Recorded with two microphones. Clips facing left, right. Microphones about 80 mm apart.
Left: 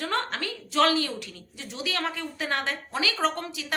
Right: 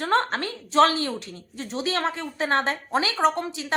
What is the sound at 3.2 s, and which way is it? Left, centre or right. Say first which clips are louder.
Speech: right 5 dB; right.